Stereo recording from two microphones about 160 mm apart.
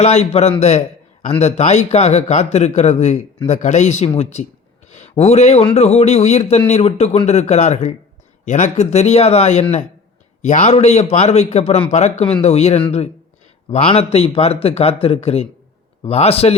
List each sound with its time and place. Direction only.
0.0 s a man's voice: 40° left (ahead or behind)